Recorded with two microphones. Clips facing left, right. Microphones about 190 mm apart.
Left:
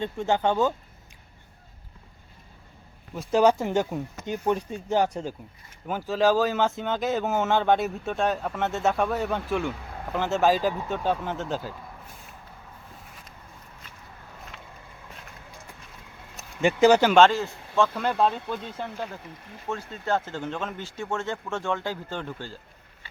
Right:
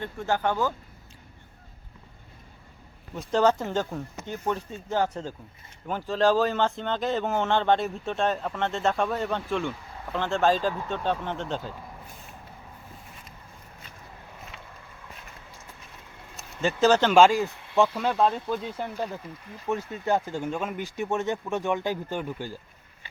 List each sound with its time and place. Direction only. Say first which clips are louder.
0.0 s speech: left 3 dB; 20° left (ahead or behind)
3.2 s speech: left 2 dB; 10° left (ahead or behind)
14.5 s vehicle: even; centre (ahead or behind)
16.6 s speech: left 3 dB; 15° left (ahead or behind)
17.2 s speech: even; 10° right (ahead or behind)
17.9 s speech: even; centre (ahead or behind)
19.6 s speech: right 3 dB; 15° right (ahead or behind)